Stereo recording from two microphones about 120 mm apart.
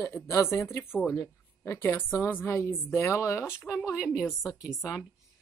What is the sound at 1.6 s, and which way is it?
A woman's voice, 20° left (ahead or behind).